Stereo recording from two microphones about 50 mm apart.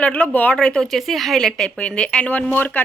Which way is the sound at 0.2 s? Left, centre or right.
Left.